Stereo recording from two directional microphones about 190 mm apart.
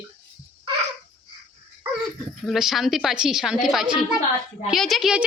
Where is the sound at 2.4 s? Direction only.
Centre (ahead or behind).